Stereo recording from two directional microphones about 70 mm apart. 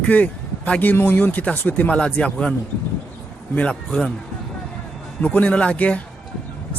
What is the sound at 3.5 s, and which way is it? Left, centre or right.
Speech, centre.